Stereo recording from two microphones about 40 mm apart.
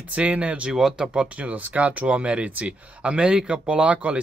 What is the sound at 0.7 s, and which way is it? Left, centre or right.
Speech, centre.